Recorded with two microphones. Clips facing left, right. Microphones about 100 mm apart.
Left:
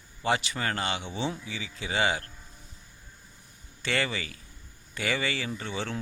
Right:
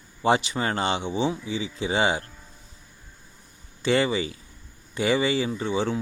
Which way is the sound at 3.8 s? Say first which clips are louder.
Right 8 dB; 20° right (ahead or behind).